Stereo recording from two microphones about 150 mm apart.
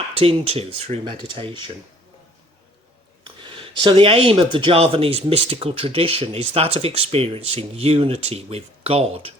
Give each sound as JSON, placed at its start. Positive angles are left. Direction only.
{"t": 0.2, "sound": "speech", "side_deg": -40}
{"t": 3.2, "sound": "speech", "side_deg": -35}